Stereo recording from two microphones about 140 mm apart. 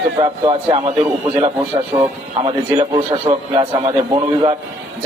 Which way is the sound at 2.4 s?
35° right (ahead or behind).